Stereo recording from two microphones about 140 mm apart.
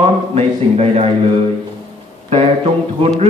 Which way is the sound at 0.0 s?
50° right (ahead or behind).